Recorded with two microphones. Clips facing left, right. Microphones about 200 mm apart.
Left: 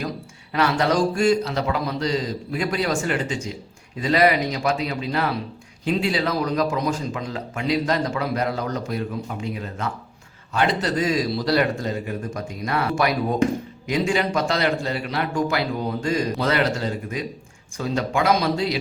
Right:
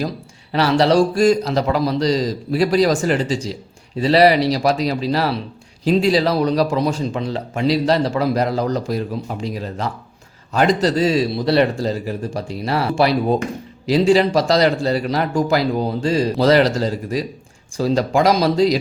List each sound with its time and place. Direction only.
0.5 s speech: 30° right (ahead or behind)